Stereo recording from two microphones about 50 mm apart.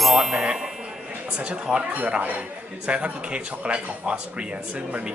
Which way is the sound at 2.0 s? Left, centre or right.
Right.